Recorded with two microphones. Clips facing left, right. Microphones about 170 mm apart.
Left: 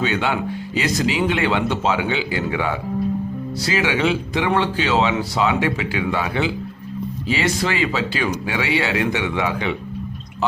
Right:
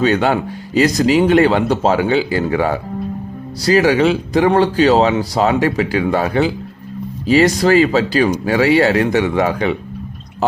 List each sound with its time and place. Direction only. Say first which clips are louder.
0.0 s speech: right 7 dB; 40° right (ahead or behind)